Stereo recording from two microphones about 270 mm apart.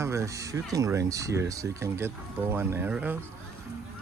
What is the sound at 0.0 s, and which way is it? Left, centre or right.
Speech, centre.